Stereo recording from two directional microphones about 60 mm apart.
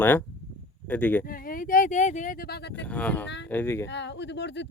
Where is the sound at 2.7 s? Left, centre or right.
Left.